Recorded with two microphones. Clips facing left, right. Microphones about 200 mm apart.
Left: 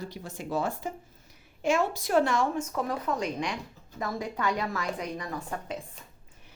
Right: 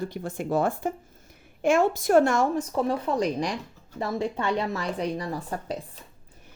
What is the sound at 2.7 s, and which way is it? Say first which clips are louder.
Speech: right 5 dB; 30° right (ahead or behind).